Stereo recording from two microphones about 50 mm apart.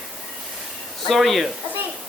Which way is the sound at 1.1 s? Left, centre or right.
Centre.